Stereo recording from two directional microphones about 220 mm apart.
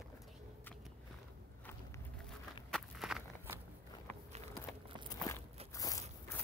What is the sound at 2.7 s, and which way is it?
Walk, centre (ahead or behind).